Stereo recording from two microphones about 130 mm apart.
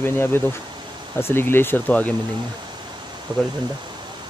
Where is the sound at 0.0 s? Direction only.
15° left (ahead or behind).